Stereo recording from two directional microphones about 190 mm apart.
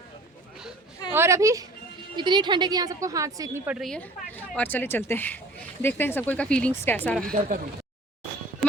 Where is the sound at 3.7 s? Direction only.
5° left (ahead or behind).